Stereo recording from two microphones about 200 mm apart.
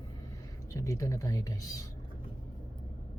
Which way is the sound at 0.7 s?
15° left (ahead or behind).